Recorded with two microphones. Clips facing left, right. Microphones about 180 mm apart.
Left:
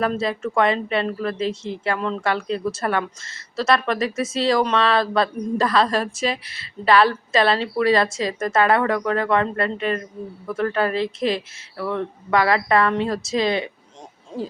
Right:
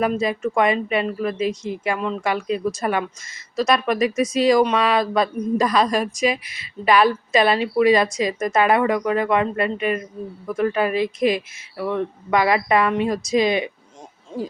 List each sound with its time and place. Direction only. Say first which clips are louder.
0.0 s speech: right 2 dB; 15° right (ahead or behind)